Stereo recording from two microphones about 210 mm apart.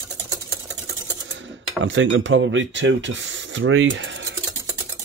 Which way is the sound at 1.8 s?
65° right (ahead or behind).